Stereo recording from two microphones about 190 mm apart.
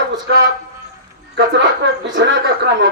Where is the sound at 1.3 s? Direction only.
65° right (ahead or behind).